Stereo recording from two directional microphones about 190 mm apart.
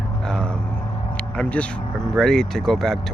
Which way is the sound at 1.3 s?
5° left (ahead or behind).